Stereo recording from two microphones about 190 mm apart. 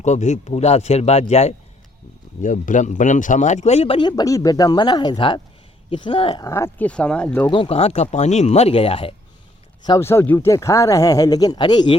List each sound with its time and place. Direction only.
0.0 s speech: 40° left (ahead or behind)
6.4 s speech: 15° left (ahead or behind)
7.5 s speech: 30° left (ahead or behind)
9.8 s speech: 15° left (ahead or behind)